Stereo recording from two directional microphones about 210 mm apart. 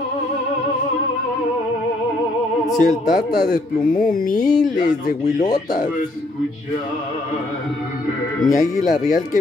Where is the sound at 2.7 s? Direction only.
40° left (ahead or behind).